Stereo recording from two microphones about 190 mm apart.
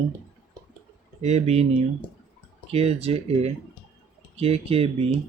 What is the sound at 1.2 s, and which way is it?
Speech, 35° right (ahead or behind).